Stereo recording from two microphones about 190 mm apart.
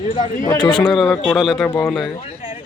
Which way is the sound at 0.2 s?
20° left (ahead or behind).